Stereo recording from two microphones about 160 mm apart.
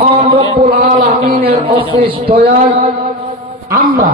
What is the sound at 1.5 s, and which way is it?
Speech, 35° right (ahead or behind).